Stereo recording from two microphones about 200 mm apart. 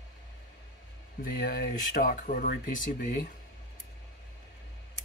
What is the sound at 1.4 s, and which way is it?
Speech, 45° left (ahead or behind).